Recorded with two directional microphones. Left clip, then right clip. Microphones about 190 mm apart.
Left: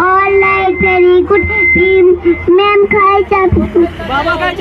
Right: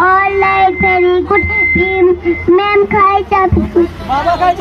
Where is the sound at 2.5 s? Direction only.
20° right (ahead or behind).